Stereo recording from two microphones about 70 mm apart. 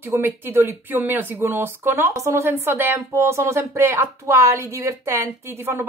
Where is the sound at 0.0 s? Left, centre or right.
Right.